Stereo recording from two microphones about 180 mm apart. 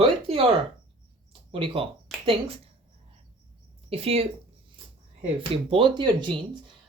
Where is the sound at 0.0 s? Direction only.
30° right (ahead or behind).